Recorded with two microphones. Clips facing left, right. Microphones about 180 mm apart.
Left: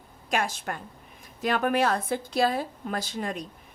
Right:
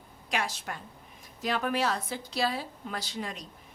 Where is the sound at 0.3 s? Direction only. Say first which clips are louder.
Left 5 dB; 50° left (ahead or behind).